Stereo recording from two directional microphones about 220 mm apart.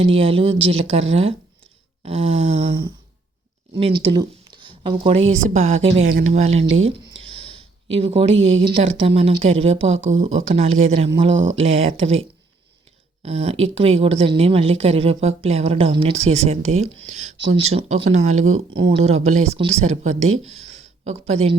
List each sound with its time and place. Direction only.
0.0 s a woman's voice: 25° right (ahead or behind)
6.0 s speech: 65° right (ahead or behind)
6.2 s a woman's voice: 30° right (ahead or behind)
13.2 s a woman's voice: 30° right (ahead or behind)